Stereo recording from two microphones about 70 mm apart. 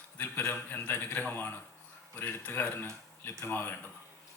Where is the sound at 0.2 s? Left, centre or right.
Left.